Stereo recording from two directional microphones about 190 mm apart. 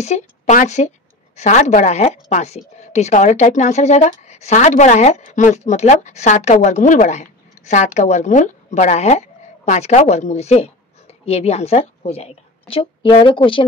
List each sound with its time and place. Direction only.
0.0 s a woman's voice: 35° left (ahead or behind)